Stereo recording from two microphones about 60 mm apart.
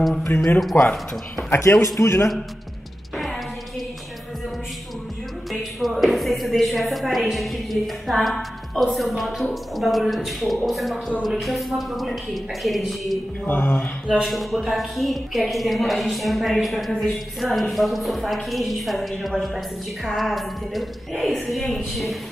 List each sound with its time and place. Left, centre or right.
0.7 s speech: left
1.5 s a man's voice: left
5.5 s a woman's voice: centre
13.5 s speech: left
14.2 s a woman's voice: centre